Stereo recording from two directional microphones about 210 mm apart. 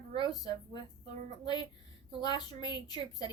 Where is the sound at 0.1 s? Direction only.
20° left (ahead or behind).